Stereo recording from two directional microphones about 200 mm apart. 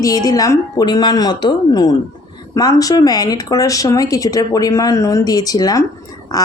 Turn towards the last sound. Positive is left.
turn(degrees=20)  # may be behind; listen again after turning